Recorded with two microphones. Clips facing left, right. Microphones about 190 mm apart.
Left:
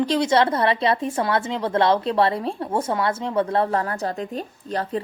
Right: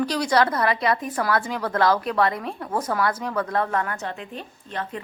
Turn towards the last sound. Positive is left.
turn(degrees=35)  # may be behind; listen again after turning